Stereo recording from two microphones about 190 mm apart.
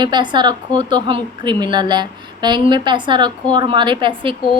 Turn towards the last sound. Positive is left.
turn(degrees=-25)  # may be behind; listen again after turning